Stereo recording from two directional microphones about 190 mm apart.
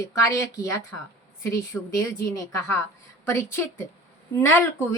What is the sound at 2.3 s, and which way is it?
Speech, 15° left (ahead or behind).